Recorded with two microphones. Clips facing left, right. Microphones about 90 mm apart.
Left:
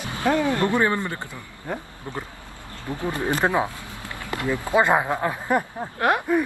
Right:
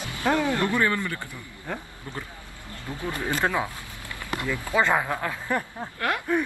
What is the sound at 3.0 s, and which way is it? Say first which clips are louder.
Speech: left 3 dB; 25° left (ahead or behind).